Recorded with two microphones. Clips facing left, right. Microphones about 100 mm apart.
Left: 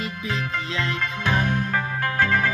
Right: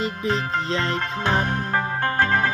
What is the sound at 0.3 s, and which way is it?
Music, 35° right (ahead or behind).